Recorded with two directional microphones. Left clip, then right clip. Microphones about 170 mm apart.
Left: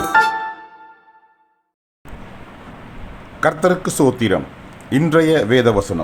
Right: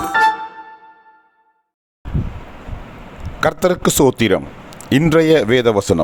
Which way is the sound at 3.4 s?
55° right (ahead or behind).